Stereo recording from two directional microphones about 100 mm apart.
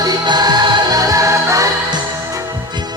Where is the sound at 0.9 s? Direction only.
35° right (ahead or behind).